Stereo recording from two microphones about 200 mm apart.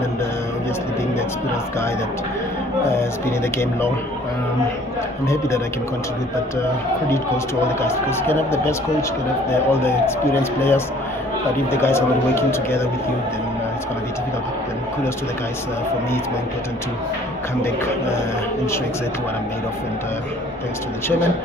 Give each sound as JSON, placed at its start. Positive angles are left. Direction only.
{"t": 2.8, "sound": "speech", "side_deg": 15}
{"t": 7.6, "sound": "speech", "side_deg": 10}
{"t": 17.6, "sound": "speech", "side_deg": 15}